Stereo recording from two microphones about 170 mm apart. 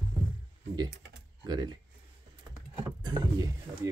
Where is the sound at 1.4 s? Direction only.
25° right (ahead or behind).